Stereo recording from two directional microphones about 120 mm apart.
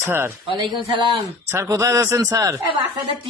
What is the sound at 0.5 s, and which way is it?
Speech, 40° right (ahead or behind).